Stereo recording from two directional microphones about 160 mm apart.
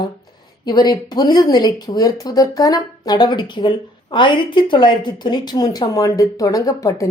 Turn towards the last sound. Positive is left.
turn(degrees=20)  # may be behind; listen again after turning